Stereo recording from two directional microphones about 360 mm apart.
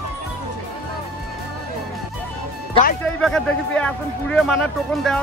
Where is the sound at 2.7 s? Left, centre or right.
Left.